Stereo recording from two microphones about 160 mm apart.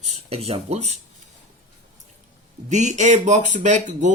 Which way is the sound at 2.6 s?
45° right (ahead or behind).